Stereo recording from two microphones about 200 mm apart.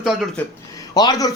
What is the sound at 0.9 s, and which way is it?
Speech, 20° left (ahead or behind).